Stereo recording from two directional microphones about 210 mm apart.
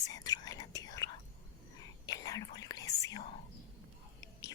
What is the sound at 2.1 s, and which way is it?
Whispering, 15° left (ahead or behind).